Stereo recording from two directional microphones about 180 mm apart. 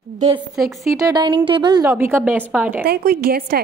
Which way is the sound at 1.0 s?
25° right (ahead or behind).